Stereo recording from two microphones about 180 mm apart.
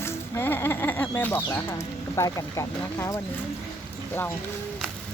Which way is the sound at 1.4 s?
20° left (ahead or behind).